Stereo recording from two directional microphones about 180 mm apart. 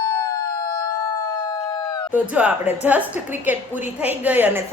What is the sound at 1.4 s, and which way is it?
Howl, 20° left (ahead or behind).